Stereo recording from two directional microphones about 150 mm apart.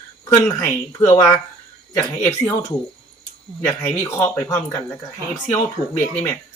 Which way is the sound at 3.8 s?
20° left (ahead or behind).